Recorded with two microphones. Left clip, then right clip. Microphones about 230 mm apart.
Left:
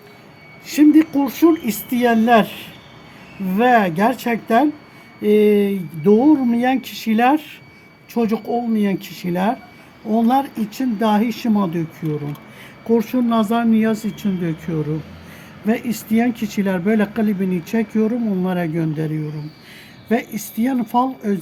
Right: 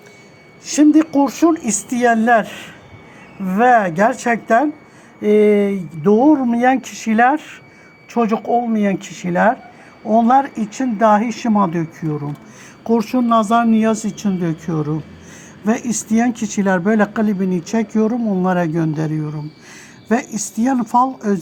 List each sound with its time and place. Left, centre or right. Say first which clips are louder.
0.6 s speech: even; centre